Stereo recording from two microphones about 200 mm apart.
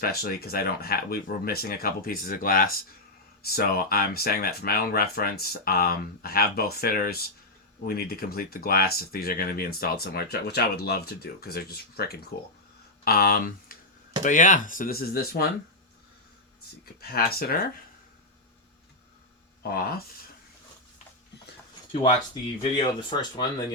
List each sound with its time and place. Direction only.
0.0 s speech: 50° left (ahead or behind)
17.1 s speech: 50° left (ahead or behind)
19.6 s speech: 50° left (ahead or behind)
22.6 s speech: 25° left (ahead or behind)